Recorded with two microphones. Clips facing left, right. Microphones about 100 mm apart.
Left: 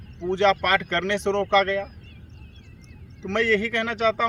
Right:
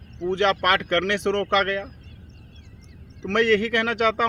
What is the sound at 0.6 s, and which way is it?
Speech, 70° right (ahead or behind).